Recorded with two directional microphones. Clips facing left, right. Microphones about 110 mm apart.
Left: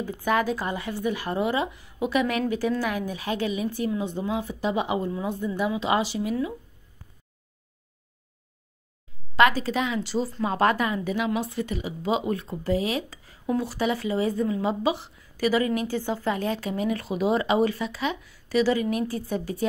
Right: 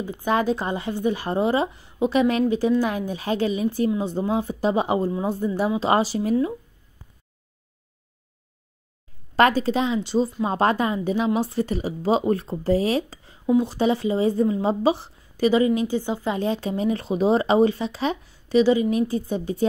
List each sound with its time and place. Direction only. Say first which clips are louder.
0.0 s speech: right 2 dB; 25° right (ahead or behind)
9.4 s speech: right 3 dB; 30° right (ahead or behind)